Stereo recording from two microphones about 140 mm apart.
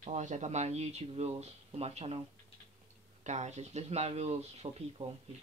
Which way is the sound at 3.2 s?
55° right (ahead or behind).